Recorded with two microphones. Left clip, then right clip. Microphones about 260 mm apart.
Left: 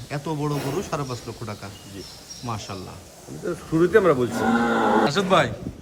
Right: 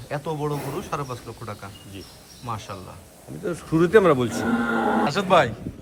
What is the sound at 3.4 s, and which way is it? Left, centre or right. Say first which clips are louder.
Speech: even; right.